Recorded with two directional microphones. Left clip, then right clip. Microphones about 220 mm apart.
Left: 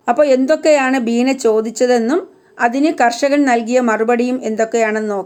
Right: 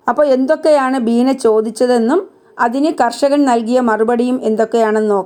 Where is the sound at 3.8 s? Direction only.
90° right.